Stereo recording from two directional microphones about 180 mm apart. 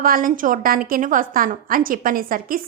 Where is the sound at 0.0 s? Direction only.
50° right (ahead or behind).